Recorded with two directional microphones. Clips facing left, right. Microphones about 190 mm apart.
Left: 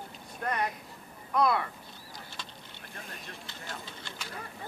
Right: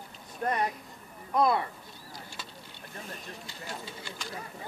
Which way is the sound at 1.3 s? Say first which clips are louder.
Right 1 dB; 25° right (ahead or behind).